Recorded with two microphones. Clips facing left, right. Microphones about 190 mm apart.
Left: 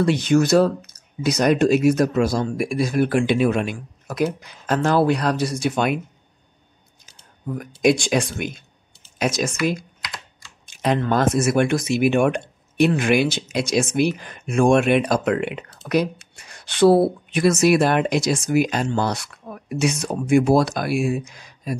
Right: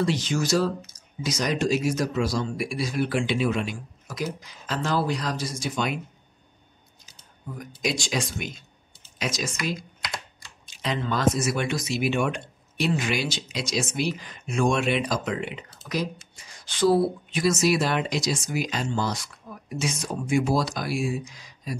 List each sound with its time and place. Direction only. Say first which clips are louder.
0.0 s speech: left 8 dB; 60° left (ahead or behind)
7.5 s speech: left 11 dB; 55° left (ahead or behind)